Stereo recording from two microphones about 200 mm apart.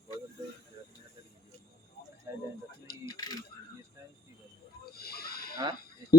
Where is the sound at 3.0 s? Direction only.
20° left (ahead or behind).